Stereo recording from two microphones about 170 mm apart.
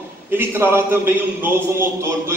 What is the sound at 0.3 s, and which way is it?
A man's voice, 15° right (ahead or behind).